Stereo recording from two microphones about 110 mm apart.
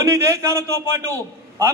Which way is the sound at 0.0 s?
25° right (ahead or behind).